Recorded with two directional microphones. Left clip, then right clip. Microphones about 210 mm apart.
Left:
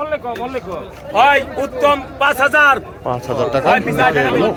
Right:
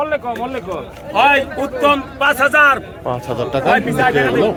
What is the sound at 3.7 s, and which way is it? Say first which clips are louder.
Speech: right 1 dB; 20° left (ahead or behind).